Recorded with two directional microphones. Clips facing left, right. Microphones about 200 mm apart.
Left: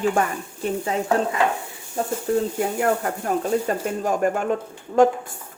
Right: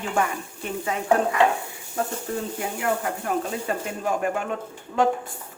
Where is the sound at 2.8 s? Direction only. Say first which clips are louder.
Left 1 dB; 40° left (ahead or behind).